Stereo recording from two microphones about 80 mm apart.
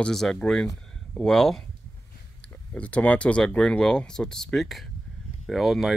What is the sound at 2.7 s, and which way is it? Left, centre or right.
Speech, centre.